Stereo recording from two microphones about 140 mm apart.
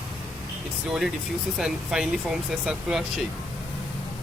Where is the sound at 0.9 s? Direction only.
5° right (ahead or behind).